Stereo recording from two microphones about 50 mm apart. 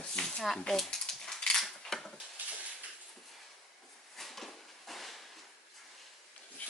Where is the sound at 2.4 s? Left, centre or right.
Right.